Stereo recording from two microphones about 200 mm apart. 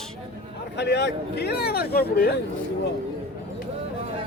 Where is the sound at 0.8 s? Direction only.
55° left (ahead or behind).